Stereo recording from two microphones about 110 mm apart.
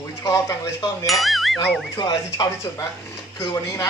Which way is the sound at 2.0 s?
35° left (ahead or behind).